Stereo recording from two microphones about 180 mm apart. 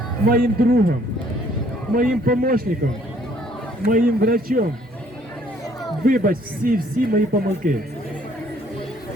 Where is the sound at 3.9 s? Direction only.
55° right (ahead or behind).